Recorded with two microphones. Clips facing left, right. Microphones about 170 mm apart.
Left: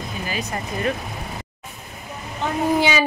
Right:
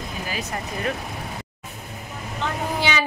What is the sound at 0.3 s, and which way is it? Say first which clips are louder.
Speech: left 2 dB; 5° right (ahead or behind).